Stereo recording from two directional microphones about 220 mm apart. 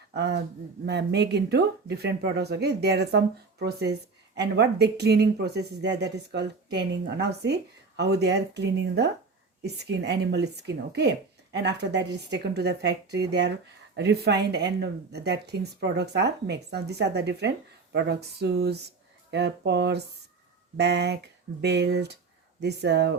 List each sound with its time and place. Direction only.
0.1 s speech: 50° right (ahead or behind)